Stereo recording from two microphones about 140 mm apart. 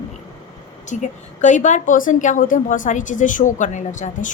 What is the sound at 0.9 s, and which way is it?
A woman's voice, 60° left (ahead or behind).